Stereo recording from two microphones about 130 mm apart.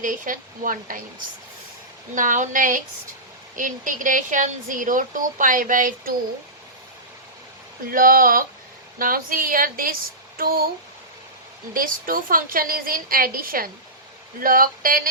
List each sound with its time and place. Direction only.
0.0 s speech: 90° right
2.1 s speech: 85° right
7.9 s speech: 90° right
11.7 s speech: 90° right